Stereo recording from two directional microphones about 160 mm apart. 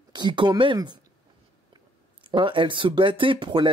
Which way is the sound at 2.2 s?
30° right (ahead or behind).